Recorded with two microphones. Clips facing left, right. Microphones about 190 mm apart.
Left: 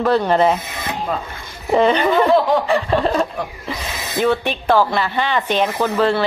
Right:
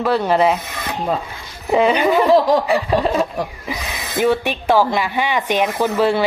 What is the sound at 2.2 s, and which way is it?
Snicker, 40° right (ahead or behind).